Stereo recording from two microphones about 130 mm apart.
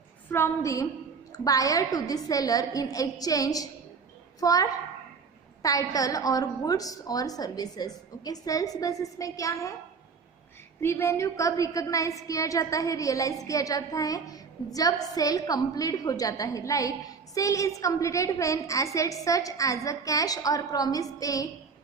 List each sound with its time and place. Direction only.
0.3 s a woman's voice: 20° left (ahead or behind)
10.8 s a woman's voice: 20° left (ahead or behind)